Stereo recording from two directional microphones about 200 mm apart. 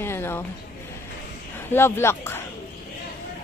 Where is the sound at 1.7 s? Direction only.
10° left (ahead or behind).